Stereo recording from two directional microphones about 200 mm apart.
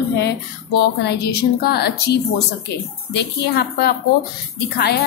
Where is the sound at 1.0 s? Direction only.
50° left (ahead or behind).